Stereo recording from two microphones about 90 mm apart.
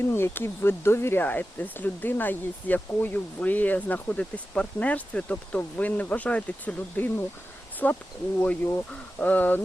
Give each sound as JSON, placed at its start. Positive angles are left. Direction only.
{"t": 0.1, "sound": "speech", "side_deg": 25}